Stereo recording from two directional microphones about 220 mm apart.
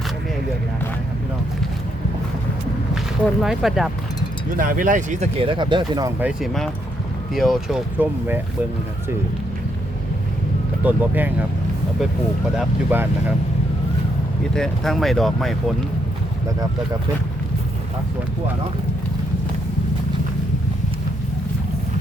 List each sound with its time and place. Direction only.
3.2 s speech: centre (ahead or behind)
4.5 s speech: 40° right (ahead or behind); by 6.1 s 20° right (ahead or behind)
6.1 s speech: 5° right (ahead or behind)
10.8 s speech: 10° right (ahead or behind)
12.5 s speech: 10° right (ahead or behind)
14.5 s speech: centre (ahead or behind)